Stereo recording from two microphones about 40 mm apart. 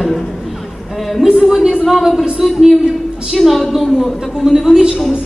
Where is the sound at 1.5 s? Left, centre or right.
Centre.